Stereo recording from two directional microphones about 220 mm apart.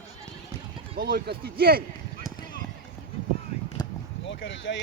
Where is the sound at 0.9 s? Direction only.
40° right (ahead or behind).